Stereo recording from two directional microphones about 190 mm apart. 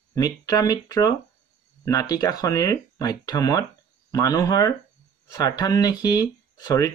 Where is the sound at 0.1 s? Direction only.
20° left (ahead or behind).